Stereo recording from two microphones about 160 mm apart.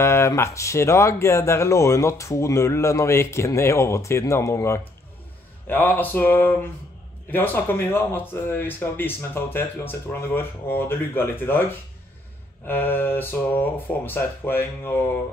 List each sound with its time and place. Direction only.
0.0 s speech: 15° left (ahead or behind)
12.6 s speech: 10° left (ahead or behind)